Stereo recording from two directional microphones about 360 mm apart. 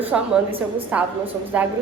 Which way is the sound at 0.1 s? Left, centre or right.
Centre.